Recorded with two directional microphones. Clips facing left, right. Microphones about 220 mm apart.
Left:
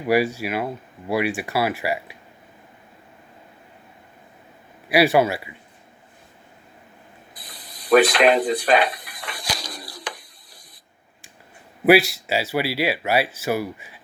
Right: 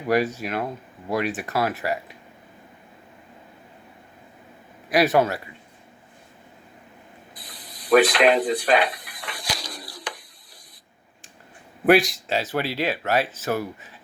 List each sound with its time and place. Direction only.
0.1 s speech: 10° left (ahead or behind)
4.9 s speech: 10° left (ahead or behind)
7.9 s a sound: 40° left (ahead or behind)
11.9 s speech: 5° left (ahead or behind)